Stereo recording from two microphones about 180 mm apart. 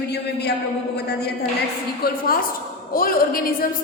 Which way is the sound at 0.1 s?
65° left (ahead or behind).